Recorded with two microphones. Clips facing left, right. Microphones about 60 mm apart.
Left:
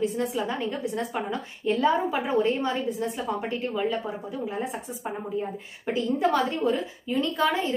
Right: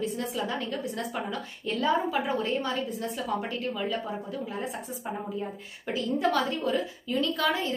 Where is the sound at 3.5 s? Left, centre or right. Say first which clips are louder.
Left 3 dB; centre.